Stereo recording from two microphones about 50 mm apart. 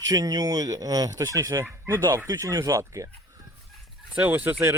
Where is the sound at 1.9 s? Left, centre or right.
Right.